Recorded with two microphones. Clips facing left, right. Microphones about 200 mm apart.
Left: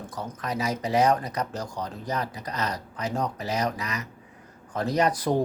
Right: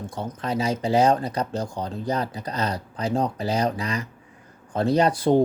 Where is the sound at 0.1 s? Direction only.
30° right (ahead or behind).